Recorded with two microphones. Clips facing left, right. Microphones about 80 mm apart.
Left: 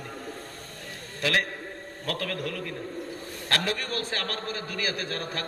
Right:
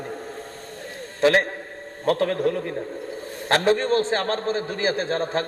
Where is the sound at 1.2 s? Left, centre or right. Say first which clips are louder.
Right 9 dB; right.